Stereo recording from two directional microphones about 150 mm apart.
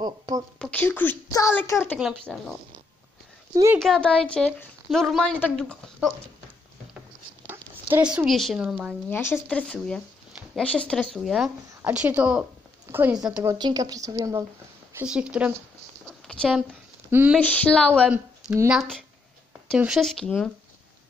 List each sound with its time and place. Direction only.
0.6 s a woman's voice: 10° left (ahead or behind)
2.3 s speech: centre (ahead or behind)
3.5 s speech: 20° right (ahead or behind)
3.8 s speech: 5° left (ahead or behind)
7.4 s speech: 10° right (ahead or behind)
9.1 s speech: 15° left (ahead or behind); by 13.4 s 5° right (ahead or behind)
13.4 s speech: 25° right (ahead or behind)
15.0 s speech: 5° right (ahead or behind)
16.1 s a sound: 5° left (ahead or behind)
17.1 s speech: 10° right (ahead or behind)
17.4 s a woman's voice: 10° left (ahead or behind)
18.1 s speech: 10° right (ahead or behind)
18.8 s speech: 5° left (ahead or behind)